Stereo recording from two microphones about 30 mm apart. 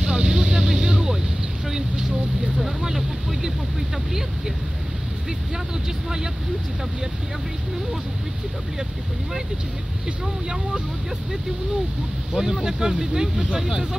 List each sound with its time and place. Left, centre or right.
0.0 s vehicle: right
12.4 s speech: centre